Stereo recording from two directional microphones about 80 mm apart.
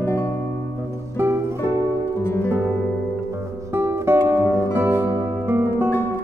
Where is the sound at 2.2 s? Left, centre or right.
Left.